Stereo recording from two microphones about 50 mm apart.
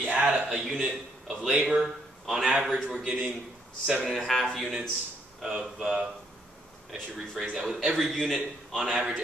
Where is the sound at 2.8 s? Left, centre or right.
Centre.